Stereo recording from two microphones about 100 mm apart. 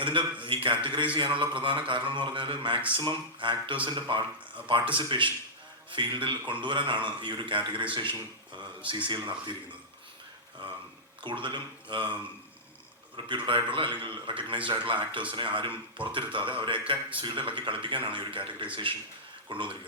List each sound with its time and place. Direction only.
0.0 s a man's voice: 55° right (ahead or behind)
11.2 s speech: 55° right (ahead or behind)
13.1 s a man's voice: 55° right (ahead or behind)